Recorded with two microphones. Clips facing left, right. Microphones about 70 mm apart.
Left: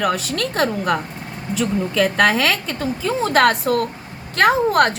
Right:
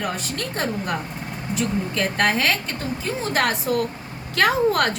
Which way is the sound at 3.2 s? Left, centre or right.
Left.